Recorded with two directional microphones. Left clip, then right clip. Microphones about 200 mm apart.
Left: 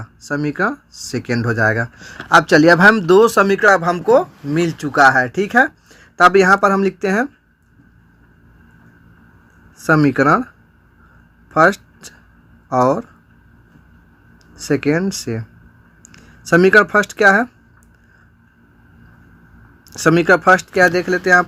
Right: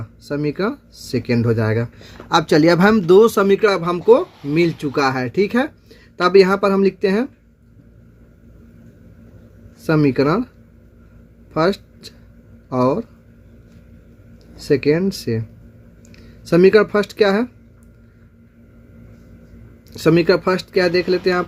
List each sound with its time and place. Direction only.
0.3 s speech: 15° left (ahead or behind)
9.7 s speech: 20° left (ahead or behind)
11.5 s speech: 20° left (ahead or behind)
14.6 s speech: 15° left (ahead or behind)
19.9 s speech: 15° left (ahead or behind)